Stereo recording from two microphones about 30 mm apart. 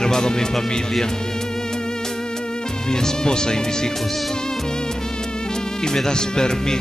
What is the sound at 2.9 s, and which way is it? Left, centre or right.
Speech, left.